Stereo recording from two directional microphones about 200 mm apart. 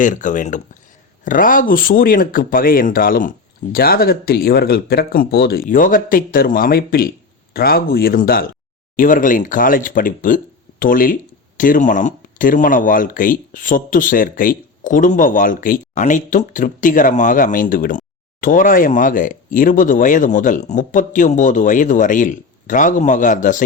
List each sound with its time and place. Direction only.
0.0 s speech: 40° left (ahead or behind)